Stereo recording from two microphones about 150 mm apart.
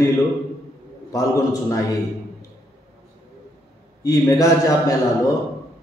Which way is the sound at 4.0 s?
25° left (ahead or behind).